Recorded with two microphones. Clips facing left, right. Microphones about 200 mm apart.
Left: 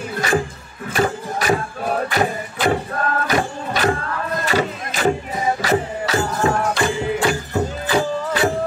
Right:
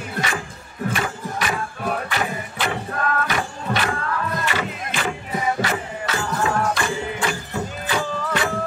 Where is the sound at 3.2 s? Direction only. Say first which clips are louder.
Left 4 dB; 40° left (ahead or behind).